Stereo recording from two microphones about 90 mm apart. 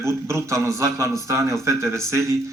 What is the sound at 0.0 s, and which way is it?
A man's voice, 30° right (ahead or behind).